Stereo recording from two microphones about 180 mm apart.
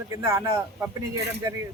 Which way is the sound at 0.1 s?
20° right (ahead or behind).